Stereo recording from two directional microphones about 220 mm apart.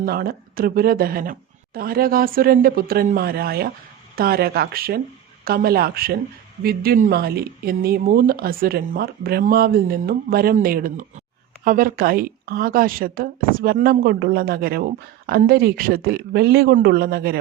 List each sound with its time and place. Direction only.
0.0 s a woman's voice: 40° right (ahead or behind)